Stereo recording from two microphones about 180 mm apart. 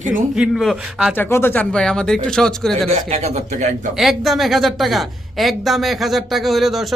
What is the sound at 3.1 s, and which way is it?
Speech, 35° right (ahead or behind).